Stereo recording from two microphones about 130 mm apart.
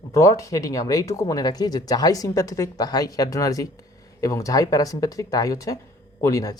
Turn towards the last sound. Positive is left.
turn(degrees=25)  # may be behind; listen again after turning